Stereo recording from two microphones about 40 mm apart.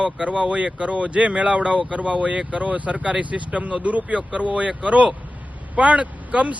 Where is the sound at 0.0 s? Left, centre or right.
Right.